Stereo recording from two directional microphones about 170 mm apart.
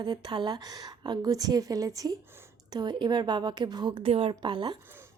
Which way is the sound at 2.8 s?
25° right (ahead or behind).